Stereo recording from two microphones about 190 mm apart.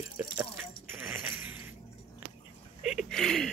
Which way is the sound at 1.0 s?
10° right (ahead or behind).